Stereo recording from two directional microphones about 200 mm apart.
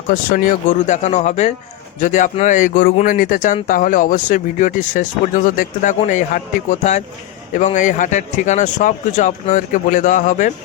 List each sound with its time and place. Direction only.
0.1 s speech: 45° left (ahead or behind)